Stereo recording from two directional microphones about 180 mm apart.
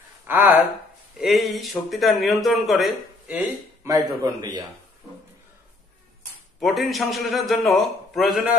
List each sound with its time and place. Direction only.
0.3 s speech: 10° right (ahead or behind)
1.2 s speech: centre (ahead or behind)
3.8 s a man's voice: 20° right (ahead or behind)
6.6 s speech: centre (ahead or behind)